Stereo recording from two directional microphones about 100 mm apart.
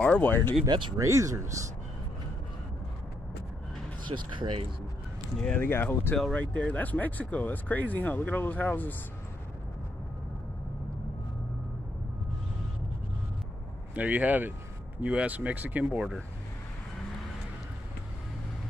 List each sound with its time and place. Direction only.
0.0 s speech: 15° left (ahead or behind)
0.7 s speech: 55° right (ahead or behind)
0.9 s speech: 30° right (ahead or behind)
4.1 s speech: 55° right (ahead or behind)
5.4 s speech: 15° left (ahead or behind)
13.9 s speech: 15° right (ahead or behind)